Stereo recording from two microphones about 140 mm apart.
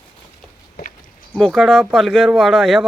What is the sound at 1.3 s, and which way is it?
Speech, centre (ahead or behind).